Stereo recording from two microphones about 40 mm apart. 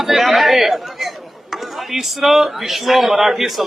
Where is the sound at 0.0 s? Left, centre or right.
Centre.